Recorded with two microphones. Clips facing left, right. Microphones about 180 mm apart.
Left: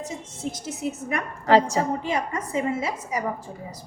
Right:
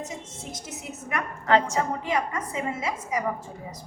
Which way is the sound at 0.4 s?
30° left (ahead or behind).